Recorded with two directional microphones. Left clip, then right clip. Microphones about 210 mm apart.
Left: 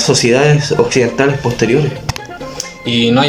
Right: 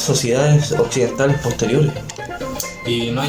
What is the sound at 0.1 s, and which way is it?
Speech, 10° left (ahead or behind).